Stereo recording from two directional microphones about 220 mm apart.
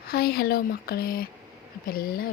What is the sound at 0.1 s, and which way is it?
Speech, 45° left (ahead or behind).